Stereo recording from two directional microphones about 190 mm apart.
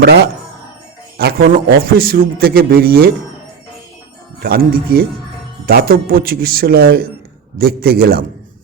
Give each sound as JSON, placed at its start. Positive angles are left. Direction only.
{"t": 0.0, "sound": "a man's voice", "side_deg": -55}
{"t": 4.4, "sound": "a man's voice", "side_deg": -50}